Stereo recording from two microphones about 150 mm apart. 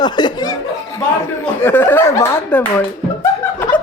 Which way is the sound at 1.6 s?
15° left (ahead or behind).